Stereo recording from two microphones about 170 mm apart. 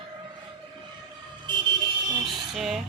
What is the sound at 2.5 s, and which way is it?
Speech, centre (ahead or behind).